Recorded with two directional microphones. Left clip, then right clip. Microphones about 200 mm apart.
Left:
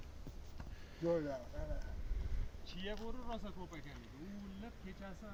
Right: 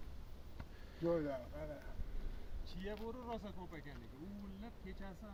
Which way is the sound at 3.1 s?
40° left (ahead or behind).